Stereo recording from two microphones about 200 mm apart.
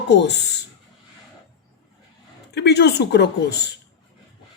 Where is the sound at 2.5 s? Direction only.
55° left (ahead or behind).